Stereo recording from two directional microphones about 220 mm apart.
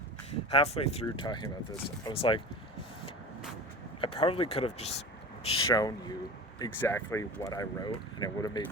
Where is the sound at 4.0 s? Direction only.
25° left (ahead or behind).